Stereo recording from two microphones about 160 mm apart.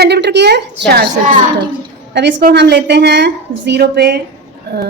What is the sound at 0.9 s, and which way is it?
Speech, 75° right (ahead or behind).